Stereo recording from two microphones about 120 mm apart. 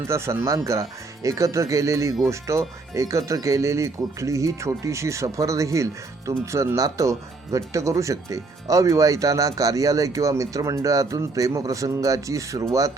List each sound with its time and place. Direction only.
0.1 s speech: 20° right (ahead or behind)